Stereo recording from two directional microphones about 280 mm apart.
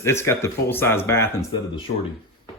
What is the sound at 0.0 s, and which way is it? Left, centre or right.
Speech, centre.